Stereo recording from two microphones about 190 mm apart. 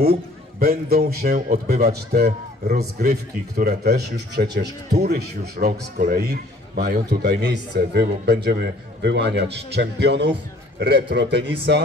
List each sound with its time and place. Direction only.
0.0 s a man's voice: 50° right (ahead or behind)